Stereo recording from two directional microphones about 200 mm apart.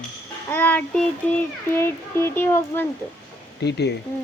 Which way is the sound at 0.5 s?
10° left (ahead or behind).